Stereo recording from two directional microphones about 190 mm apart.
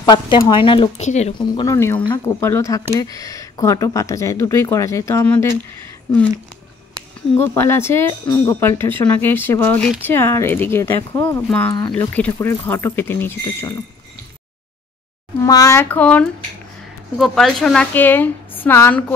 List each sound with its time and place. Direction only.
0.0 s speech: 20° left (ahead or behind)
1.4 s speech: 20° left (ahead or behind)
7.3 s speech: 10° left (ahead or behind)
15.4 s speech: 15° left (ahead or behind)